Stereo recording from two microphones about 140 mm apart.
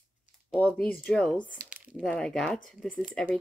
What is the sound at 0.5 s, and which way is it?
Speech, 10° left (ahead or behind).